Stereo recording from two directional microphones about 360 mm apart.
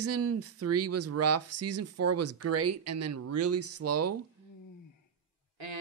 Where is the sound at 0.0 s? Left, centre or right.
Right.